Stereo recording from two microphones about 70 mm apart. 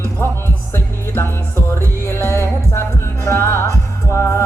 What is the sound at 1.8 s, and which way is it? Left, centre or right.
Music, left.